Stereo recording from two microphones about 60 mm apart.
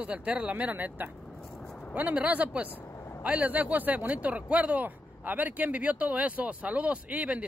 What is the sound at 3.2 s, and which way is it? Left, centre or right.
Speech, right.